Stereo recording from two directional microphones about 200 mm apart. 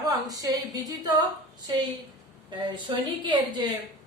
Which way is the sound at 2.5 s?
20° right (ahead or behind).